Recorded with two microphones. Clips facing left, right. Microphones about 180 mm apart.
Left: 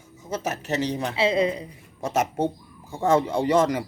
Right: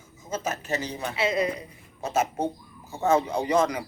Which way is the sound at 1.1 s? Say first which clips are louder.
Left 3 dB; 30° left (ahead or behind).